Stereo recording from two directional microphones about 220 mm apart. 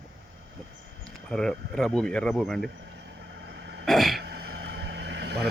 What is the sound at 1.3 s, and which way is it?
Speech, 5° left (ahead or behind).